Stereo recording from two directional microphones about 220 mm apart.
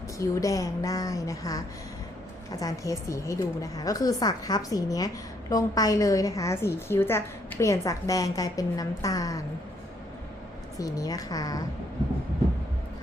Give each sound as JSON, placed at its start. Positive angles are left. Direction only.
{"t": 0.2, "sound": "a woman's voice", "side_deg": 15}
{"t": 10.8, "sound": "a woman's voice", "side_deg": 15}